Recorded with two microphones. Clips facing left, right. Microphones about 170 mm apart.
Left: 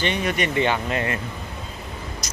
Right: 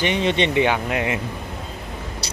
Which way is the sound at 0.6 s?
10° right (ahead or behind).